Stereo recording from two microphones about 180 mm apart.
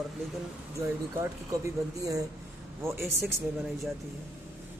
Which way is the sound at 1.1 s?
15° right (ahead or behind).